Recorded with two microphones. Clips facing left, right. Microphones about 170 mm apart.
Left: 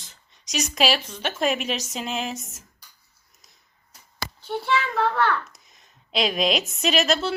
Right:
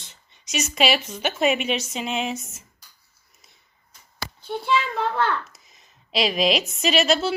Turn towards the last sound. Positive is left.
turn(degrees=0)  # may be behind; listen again after turning